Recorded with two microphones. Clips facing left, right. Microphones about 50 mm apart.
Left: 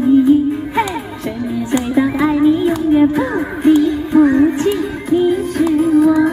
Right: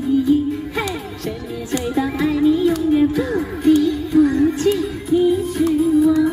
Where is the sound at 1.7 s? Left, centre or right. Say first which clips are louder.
Left 5 dB; left.